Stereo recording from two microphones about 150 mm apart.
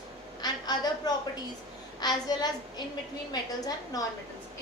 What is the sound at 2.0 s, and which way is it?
A child's voice, 25° left (ahead or behind).